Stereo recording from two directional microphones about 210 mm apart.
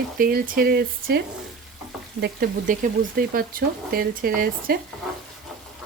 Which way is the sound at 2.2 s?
40° right (ahead or behind).